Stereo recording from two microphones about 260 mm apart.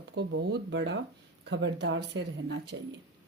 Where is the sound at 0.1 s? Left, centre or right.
Right.